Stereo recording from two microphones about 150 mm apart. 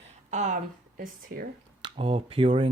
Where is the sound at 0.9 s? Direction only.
80° right.